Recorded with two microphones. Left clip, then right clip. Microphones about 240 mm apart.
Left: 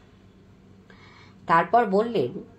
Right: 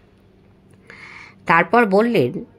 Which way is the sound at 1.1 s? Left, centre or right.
Right.